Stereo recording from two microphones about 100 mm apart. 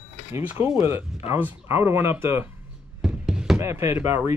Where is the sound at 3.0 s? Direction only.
10° right (ahead or behind).